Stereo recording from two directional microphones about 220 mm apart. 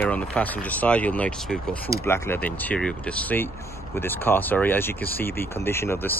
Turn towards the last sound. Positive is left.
turn(degrees=10)  # may be behind; listen again after turning